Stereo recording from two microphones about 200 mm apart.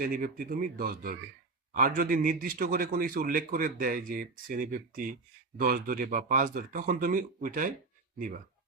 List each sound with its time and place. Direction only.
0.1 s a man's voice: 45° right (ahead or behind)